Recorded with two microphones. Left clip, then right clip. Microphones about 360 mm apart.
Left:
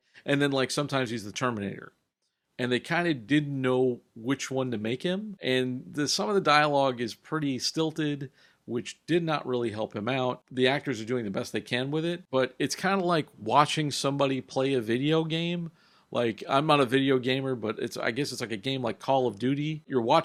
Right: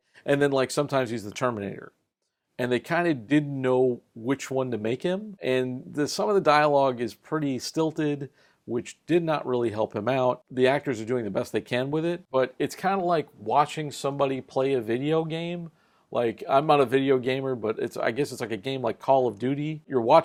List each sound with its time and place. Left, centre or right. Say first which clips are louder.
0.3 s speech: right 3 dB; right